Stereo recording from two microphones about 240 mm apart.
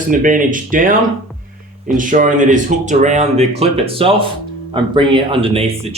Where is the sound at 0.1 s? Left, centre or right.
Right.